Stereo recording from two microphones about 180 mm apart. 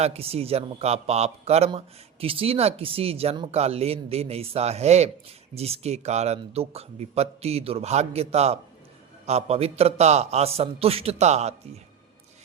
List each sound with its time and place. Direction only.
0.0 s speech: 35° right (ahead or behind)